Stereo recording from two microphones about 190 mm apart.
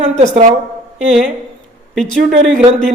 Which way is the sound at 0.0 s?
35° right (ahead or behind).